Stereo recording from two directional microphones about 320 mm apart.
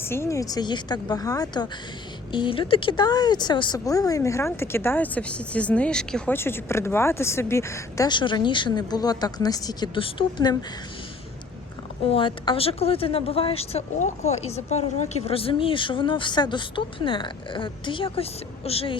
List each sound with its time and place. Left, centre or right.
0.0 s speech: centre
12.1 s speech: centre